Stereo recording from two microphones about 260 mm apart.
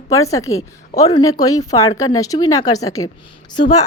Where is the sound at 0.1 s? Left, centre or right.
Centre.